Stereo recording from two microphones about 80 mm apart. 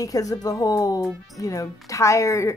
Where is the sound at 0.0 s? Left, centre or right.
Left.